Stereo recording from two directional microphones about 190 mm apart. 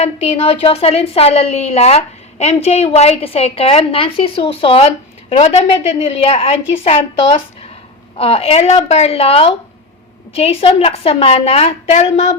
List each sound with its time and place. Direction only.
0.0 s a woman's voice: 35° left (ahead or behind)